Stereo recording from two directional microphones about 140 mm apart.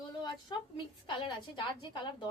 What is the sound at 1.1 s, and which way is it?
A woman's voice, 35° left (ahead or behind).